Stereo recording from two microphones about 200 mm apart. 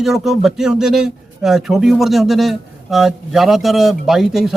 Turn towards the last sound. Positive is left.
turn(degrees=0)  # may be behind; listen again after turning